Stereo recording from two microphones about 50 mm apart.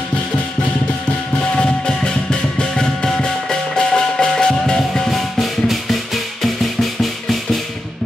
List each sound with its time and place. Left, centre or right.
1.6 s music: centre